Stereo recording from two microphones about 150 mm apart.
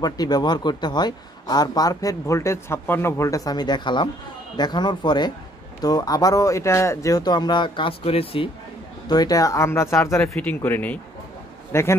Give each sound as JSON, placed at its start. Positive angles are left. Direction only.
{"t": 0.0, "sound": "a man's voice", "side_deg": 25}
{"t": 9.1, "sound": "a man's voice", "side_deg": 25}